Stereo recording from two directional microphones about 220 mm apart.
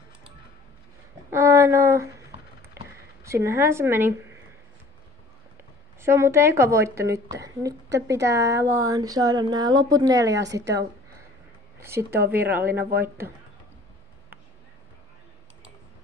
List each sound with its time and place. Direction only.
1.3 s a sound: 15° right (ahead or behind)
3.3 s a woman's voice: 10° right (ahead or behind)
5.9 s a woman's voice: 10° right (ahead or behind)
11.8 s a woman's voice: 10° right (ahead or behind)